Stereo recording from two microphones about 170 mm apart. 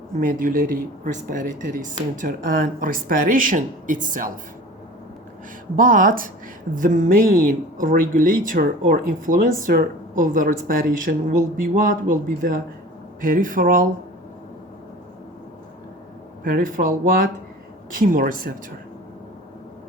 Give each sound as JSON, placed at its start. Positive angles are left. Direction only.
{"t": 0.2, "sound": "speech", "side_deg": -50}
{"t": 5.7, "sound": "speech", "side_deg": -55}
{"t": 16.4, "sound": "speech", "side_deg": -55}